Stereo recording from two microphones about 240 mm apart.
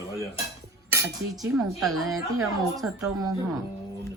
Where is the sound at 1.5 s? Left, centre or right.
Centre.